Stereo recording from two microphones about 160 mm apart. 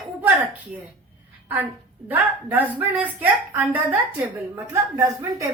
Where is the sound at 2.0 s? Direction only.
10° right (ahead or behind).